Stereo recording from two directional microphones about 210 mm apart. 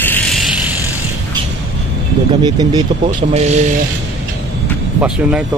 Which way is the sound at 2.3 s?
20° right (ahead or behind).